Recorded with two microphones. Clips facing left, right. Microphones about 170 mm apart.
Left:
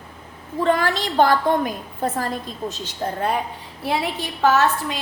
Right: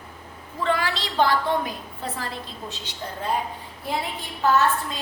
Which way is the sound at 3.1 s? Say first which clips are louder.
Left 3 dB; 65° left (ahead or behind).